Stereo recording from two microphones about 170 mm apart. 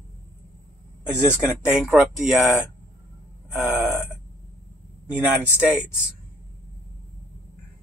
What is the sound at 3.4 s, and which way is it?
Burping, 10° right (ahead or behind).